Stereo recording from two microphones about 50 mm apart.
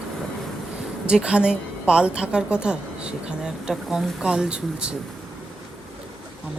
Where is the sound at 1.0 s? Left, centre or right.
Centre.